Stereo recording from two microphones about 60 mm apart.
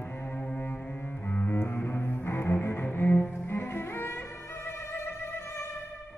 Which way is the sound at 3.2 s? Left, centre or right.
Left.